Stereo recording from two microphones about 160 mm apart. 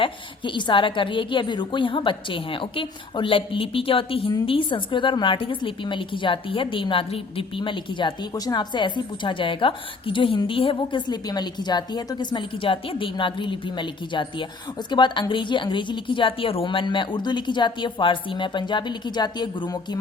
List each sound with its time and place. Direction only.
0.0 s a woman's voice: 30° left (ahead or behind)